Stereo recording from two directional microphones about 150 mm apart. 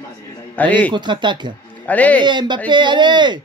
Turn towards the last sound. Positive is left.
turn(degrees=-30)  # may be behind; listen again after turning